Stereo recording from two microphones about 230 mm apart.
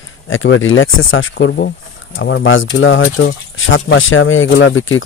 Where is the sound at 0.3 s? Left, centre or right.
Left.